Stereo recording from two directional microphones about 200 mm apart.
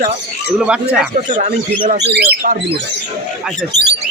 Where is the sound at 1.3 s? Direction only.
40° right (ahead or behind).